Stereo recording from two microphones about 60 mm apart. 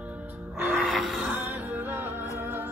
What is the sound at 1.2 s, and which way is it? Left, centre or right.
Music, right.